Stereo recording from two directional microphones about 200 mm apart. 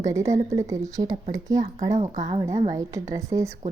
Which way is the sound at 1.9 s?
35° right (ahead or behind).